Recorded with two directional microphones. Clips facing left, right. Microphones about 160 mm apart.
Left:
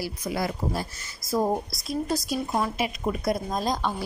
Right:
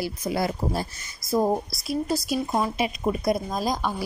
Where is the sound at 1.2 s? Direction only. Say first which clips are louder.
Right 2 dB; 15° right (ahead or behind).